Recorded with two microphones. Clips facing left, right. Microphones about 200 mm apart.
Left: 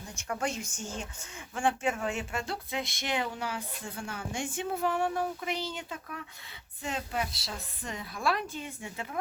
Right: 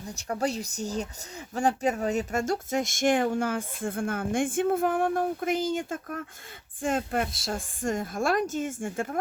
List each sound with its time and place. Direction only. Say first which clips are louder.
0.2 s speech: right 5 dB; 35° right (ahead or behind)